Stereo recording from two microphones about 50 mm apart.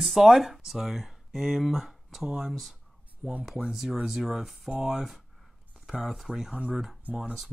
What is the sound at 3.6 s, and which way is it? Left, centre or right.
Speech, centre.